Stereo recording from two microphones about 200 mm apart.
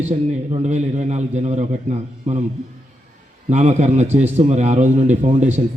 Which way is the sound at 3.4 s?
35° right (ahead or behind).